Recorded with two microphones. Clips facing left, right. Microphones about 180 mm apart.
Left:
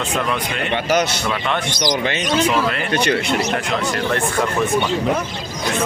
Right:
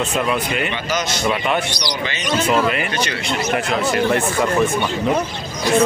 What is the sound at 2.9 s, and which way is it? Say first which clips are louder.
Speech: left 5 dB; 60° left (ahead or behind).